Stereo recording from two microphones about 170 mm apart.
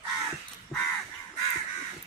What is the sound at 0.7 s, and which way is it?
Crow, centre (ahead or behind).